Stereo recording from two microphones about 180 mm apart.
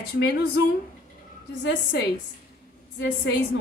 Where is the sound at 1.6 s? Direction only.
80° left.